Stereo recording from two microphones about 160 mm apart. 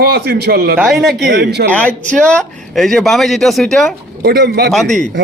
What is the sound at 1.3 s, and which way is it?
Speech, 90° right.